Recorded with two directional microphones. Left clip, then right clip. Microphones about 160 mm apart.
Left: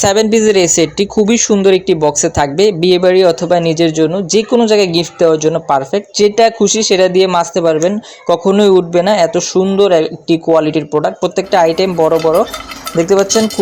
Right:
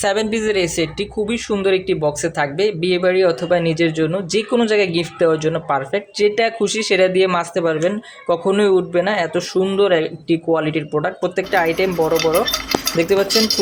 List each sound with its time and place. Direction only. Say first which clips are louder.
0.0 s speech: left 8 dB; 35° left (ahead or behind)
12.1 s speech: left 4 dB; centre (ahead or behind)
13.0 s cutlery: left 7 dB; 15° left (ahead or behind)